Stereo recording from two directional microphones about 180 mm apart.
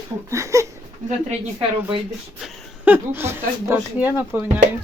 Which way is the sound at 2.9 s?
10° right (ahead or behind).